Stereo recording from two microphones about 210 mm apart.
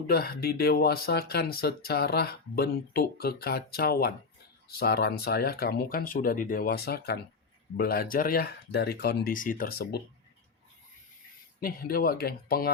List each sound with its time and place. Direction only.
0.1 s speech: 50° left (ahead or behind)
11.6 s speech: 45° left (ahead or behind)